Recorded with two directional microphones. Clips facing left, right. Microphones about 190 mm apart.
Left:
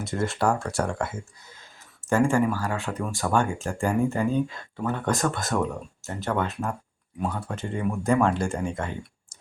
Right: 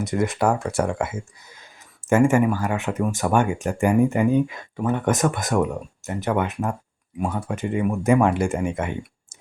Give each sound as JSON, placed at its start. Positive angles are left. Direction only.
{"t": 0.0, "sound": "speech", "side_deg": -15}